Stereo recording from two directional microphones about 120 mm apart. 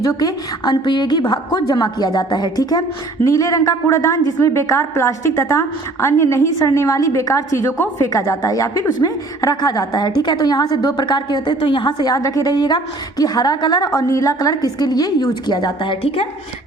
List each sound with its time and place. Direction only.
0.0 s a woman's voice: 30° left (ahead or behind); by 16.2 s 50° left (ahead or behind)